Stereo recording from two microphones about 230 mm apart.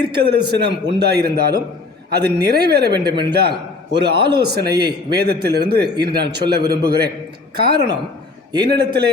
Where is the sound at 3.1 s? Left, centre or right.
Right.